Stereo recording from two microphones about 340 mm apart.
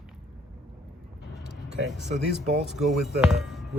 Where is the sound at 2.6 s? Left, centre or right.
Centre.